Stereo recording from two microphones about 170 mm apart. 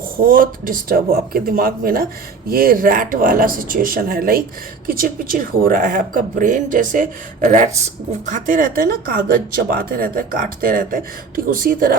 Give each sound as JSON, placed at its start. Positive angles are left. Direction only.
{"t": 0.2, "sound": "speech", "side_deg": -55}